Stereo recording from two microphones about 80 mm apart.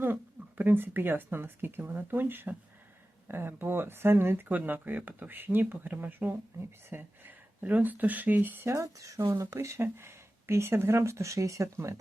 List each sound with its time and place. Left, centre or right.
0.0 s speech: right
8.7 s speech: right